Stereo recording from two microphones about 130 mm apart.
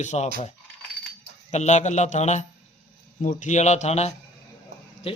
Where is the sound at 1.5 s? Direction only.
60° left (ahead or behind).